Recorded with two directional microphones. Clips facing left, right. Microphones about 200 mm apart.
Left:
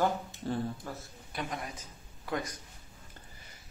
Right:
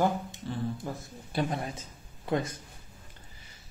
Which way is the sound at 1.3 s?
30° right (ahead or behind).